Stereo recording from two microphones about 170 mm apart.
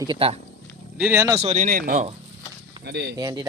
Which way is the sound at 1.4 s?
45° right (ahead or behind).